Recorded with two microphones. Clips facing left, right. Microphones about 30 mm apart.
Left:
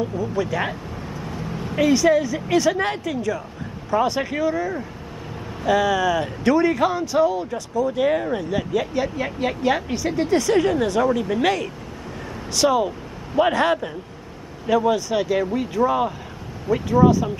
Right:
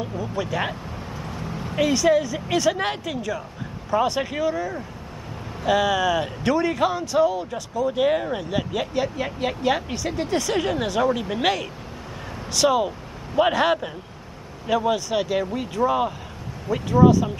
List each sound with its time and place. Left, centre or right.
0.1 s speech: centre